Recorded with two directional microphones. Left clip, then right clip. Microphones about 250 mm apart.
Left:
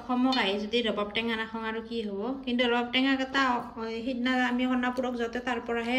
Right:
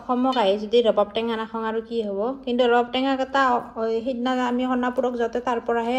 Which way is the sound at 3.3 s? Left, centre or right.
Centre.